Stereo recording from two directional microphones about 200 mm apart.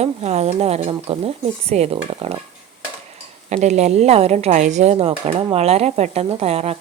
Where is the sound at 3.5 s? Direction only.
35° right (ahead or behind).